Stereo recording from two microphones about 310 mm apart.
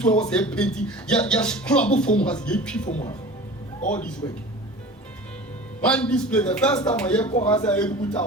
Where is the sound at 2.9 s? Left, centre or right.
Left.